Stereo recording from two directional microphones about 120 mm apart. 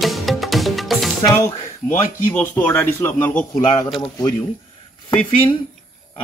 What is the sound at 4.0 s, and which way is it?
Speech, 35° left (ahead or behind).